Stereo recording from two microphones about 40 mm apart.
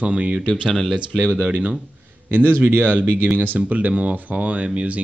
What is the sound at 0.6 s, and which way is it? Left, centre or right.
Speech, centre.